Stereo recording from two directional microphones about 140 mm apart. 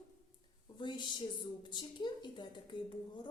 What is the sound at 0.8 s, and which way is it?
A woman's voice, 35° left (ahead or behind).